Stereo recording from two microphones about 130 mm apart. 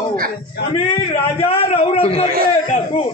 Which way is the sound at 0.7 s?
45° left (ahead or behind).